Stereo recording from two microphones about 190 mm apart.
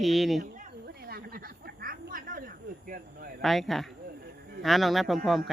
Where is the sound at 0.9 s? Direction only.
55° right (ahead or behind).